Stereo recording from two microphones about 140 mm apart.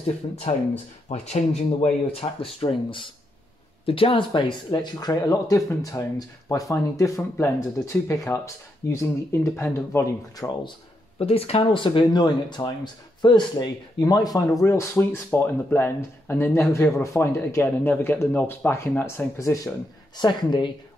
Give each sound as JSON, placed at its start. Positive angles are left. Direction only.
{"t": 0.0, "sound": "speech", "side_deg": 50}
{"t": 11.1, "sound": "speech", "side_deg": 45}
{"t": 20.2, "sound": "speech", "side_deg": 35}